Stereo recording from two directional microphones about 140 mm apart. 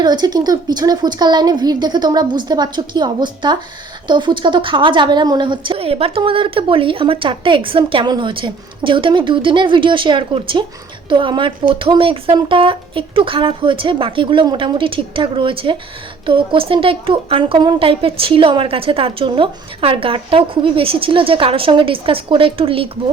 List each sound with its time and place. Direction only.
0.0 s a woman's voice: 30° right (ahead or behind)